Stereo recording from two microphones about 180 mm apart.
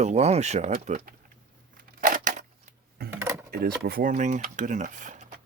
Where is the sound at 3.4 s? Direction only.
55° right (ahead or behind).